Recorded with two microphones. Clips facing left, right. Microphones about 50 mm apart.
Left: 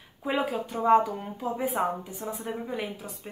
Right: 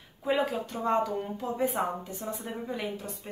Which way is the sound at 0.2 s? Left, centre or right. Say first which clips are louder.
Even; centre.